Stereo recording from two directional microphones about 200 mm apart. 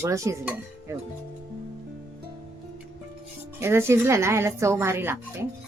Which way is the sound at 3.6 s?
10° right (ahead or behind).